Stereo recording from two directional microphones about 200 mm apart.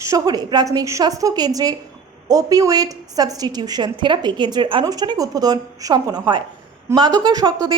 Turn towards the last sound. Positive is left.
turn(degrees=-20)  # may be behind; listen again after turning